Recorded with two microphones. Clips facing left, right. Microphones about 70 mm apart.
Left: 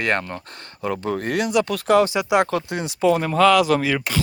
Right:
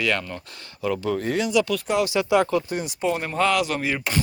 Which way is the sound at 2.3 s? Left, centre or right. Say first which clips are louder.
Left 1 dB; left.